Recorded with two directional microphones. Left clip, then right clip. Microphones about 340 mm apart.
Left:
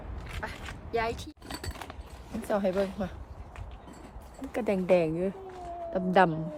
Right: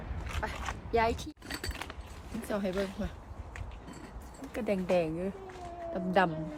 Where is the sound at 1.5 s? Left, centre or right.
Centre.